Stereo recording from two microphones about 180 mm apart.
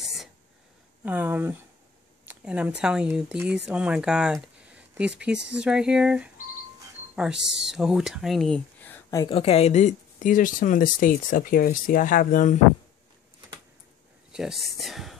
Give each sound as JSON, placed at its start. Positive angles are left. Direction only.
{"t": 0.0, "sound": "a sound", "side_deg": 0}
{"t": 1.0, "sound": "speech", "side_deg": -10}
{"t": 9.2, "sound": "speech", "side_deg": 35}
{"t": 14.3, "sound": "speech", "side_deg": 0}